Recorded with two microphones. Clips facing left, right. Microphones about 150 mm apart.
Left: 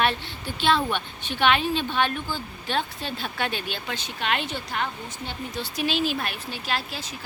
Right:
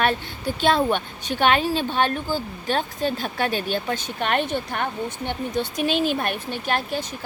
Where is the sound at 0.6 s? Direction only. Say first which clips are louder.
Right 3 dB; 45° right (ahead or behind).